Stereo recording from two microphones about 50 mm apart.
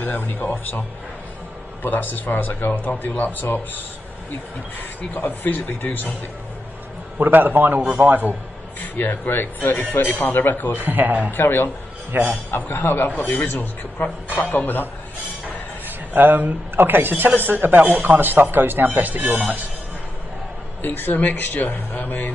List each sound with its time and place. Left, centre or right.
0.0 s speech: left
5.1 s speech: left
7.2 s speech: right
8.8 s speech: left
10.8 s speech: right
11.3 s a man's voice: left
12.1 s speech: right
12.4 s speech: left
16.1 s speech: right
20.8 s speech: left